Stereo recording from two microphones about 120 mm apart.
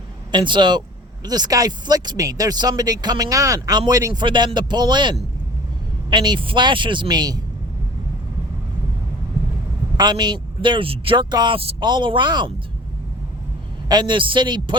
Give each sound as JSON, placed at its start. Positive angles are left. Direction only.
{"t": 0.3, "sound": "speech", "side_deg": -40}
{"t": 10.0, "sound": "speech", "side_deg": -35}
{"t": 11.8, "sound": "speech", "side_deg": -40}
{"t": 13.8, "sound": "speech", "side_deg": -40}